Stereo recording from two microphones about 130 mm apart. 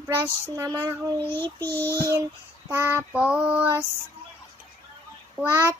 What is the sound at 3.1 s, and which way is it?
Child singing, 5° right (ahead or behind).